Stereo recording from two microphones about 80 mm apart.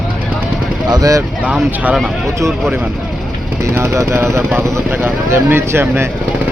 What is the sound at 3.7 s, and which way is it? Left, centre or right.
Speech, right.